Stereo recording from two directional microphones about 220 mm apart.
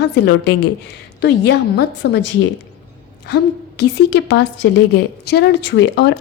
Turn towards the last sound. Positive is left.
turn(degrees=55)  # may be behind; listen again after turning